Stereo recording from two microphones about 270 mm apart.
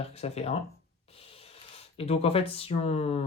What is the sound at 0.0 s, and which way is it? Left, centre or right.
Speech, left.